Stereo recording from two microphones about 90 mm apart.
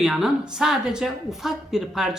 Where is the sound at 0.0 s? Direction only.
5° right (ahead or behind).